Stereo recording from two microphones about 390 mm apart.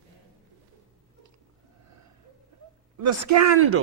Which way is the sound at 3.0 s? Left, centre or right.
Right.